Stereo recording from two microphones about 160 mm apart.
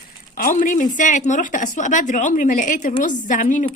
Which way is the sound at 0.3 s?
55° left (ahead or behind).